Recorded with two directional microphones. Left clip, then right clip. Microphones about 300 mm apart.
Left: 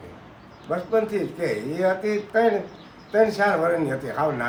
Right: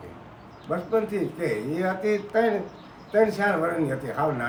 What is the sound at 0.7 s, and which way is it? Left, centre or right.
A man's voice, centre.